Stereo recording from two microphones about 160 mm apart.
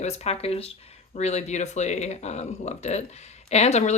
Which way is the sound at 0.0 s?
45° left (ahead or behind).